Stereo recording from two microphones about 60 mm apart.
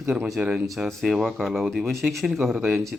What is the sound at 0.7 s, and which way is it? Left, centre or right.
Speech, centre.